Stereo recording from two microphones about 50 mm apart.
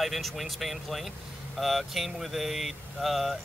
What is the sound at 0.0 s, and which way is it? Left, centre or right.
Speech, centre.